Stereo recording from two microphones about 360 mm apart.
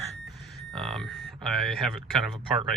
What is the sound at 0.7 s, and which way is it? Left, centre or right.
Speech, centre.